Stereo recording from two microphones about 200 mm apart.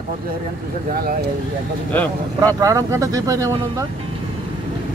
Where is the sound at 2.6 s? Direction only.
15° right (ahead or behind).